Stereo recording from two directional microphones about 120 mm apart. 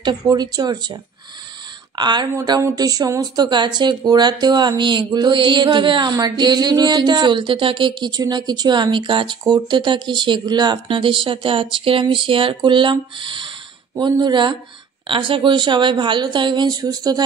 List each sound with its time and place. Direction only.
0.3 s speech: 35° right (ahead or behind)
2.0 s speech: 35° right (ahead or behind)